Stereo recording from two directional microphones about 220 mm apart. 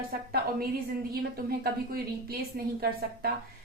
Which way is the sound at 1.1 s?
45° right (ahead or behind).